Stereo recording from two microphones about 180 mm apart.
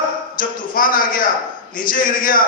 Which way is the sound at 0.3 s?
50° left (ahead or behind).